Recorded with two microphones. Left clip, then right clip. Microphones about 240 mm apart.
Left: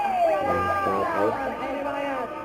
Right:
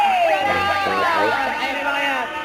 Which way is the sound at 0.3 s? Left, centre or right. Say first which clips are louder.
Right 5 dB; centre.